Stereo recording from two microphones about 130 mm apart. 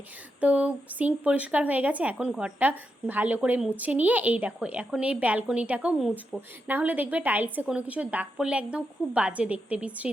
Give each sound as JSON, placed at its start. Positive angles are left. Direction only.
{"t": 0.3, "sound": "speech", "side_deg": -10}